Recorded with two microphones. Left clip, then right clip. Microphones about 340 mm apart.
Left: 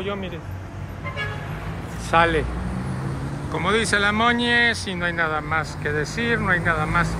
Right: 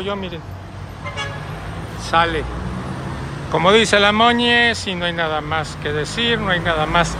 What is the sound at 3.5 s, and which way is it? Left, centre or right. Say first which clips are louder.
Speech: right 8 dB; centre.